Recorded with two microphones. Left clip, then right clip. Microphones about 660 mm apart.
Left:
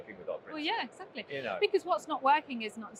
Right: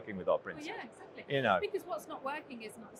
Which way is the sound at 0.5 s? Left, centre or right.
Left.